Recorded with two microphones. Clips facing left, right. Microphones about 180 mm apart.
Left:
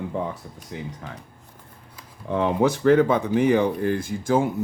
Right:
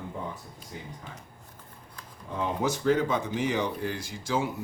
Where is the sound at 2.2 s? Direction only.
70° left (ahead or behind); by 4.5 s 50° left (ahead or behind).